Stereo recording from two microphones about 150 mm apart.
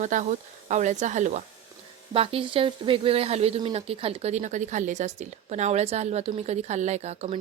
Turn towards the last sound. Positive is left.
turn(degrees=-45)  # may be behind; listen again after turning